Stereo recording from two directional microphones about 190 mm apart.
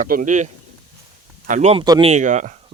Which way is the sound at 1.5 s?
35° right (ahead or behind).